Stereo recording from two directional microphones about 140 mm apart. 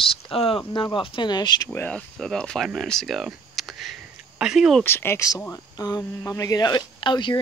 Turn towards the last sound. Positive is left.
turn(degrees=35)  # may be behind; listen again after turning